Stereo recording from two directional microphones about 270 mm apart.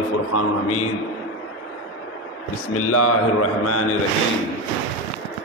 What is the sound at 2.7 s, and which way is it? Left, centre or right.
A man's voice, left.